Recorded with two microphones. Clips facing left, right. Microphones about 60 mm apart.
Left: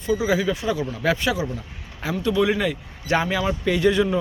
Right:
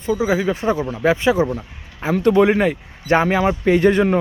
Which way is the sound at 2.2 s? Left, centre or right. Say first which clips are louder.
Right 7 dB; right.